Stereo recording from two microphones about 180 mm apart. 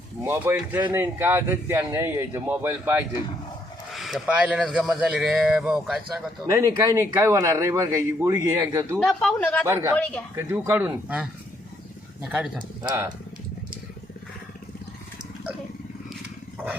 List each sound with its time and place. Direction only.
0.2 s speech: 10° right (ahead or behind)
3.9 s speech: centre (ahead or behind)
6.5 s speech: 15° right (ahead or behind)
9.0 s speech: 5° left (ahead or behind)
9.6 s speech: 15° right (ahead or behind)
9.9 s speech: 5° left (ahead or behind)
10.3 s speech: 10° right (ahead or behind)